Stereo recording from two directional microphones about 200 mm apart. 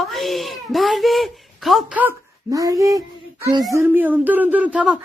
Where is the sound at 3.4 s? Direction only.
20° right (ahead or behind).